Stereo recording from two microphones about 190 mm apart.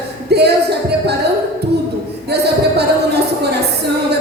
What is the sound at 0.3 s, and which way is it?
Music, 60° right (ahead or behind).